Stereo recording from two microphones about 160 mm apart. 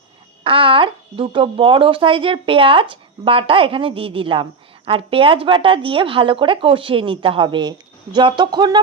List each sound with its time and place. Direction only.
0.4 s speech: 35° right (ahead or behind)